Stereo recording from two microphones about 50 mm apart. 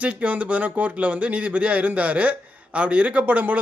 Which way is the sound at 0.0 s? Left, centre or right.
Right.